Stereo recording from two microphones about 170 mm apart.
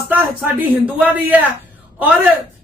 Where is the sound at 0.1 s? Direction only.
10° right (ahead or behind).